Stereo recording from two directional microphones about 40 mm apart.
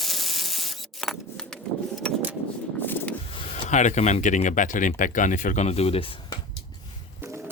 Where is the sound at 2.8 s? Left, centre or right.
Left.